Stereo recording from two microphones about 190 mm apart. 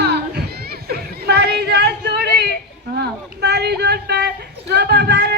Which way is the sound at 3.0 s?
60° right (ahead or behind).